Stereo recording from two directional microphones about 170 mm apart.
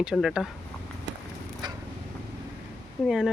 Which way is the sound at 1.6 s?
25° right (ahead or behind).